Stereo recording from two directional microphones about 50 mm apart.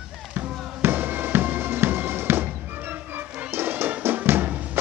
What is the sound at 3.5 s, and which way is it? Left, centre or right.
Music, right.